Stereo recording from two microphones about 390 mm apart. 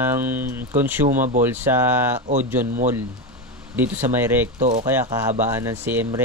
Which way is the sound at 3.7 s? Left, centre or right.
Centre.